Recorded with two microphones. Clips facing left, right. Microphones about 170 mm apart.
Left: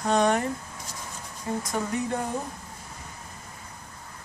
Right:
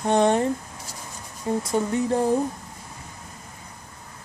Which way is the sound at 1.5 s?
25° right (ahead or behind).